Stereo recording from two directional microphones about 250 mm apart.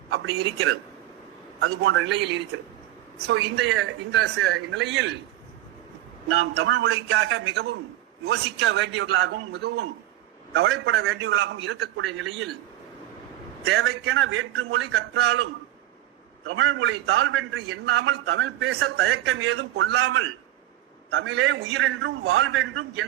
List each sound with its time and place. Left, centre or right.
1.6 s a man's voice: right
6.3 s a man's voice: right
10.5 s a man's voice: right
13.7 s a man's voice: right
16.5 s a man's voice: right